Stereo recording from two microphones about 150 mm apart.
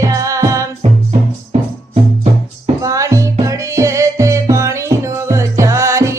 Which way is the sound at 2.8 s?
20° right (ahead or behind).